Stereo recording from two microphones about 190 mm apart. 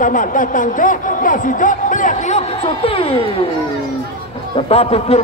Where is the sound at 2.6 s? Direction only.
30° left (ahead or behind).